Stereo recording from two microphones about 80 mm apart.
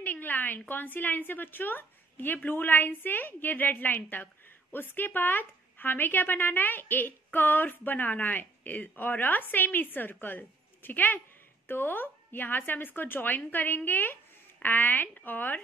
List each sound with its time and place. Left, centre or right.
0.0 s speech: left